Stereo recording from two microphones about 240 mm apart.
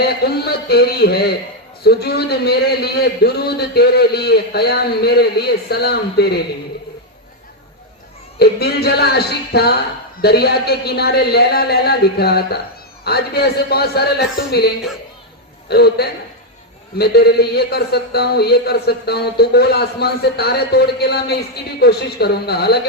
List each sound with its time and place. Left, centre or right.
0.0 s a man's voice: left
8.4 s a man's voice: left
15.7 s a man's voice: left